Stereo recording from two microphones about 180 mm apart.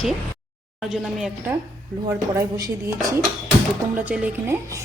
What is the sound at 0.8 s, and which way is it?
Speech, centre (ahead or behind).